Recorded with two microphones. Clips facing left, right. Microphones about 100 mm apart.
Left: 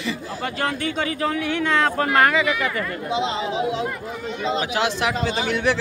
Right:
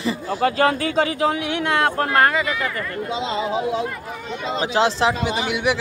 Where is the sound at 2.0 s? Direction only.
30° right (ahead or behind).